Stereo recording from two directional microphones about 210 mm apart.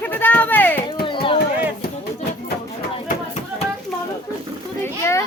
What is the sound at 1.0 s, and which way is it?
Speech, 25° left (ahead or behind).